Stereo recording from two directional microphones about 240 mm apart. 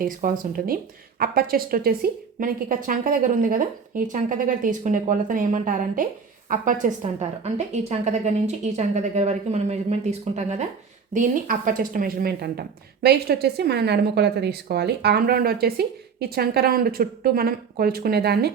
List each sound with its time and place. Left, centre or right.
0.0 s a woman's voice: right